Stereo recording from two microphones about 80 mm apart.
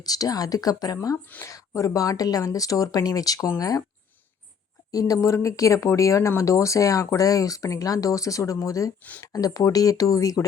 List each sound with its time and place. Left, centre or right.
0.0 s speech: left
4.9 s speech: left